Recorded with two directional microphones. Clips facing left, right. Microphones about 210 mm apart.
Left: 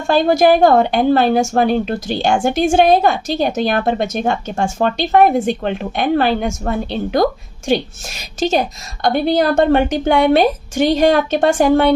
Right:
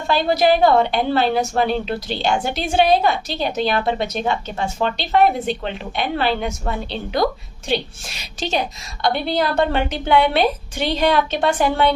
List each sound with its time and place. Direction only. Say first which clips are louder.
0.1 s a woman's voice: left 5 dB; 45° left (ahead or behind)